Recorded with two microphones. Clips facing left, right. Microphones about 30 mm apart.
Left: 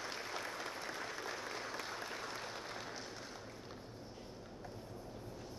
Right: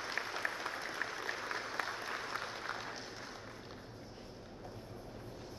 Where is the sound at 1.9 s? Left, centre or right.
Right.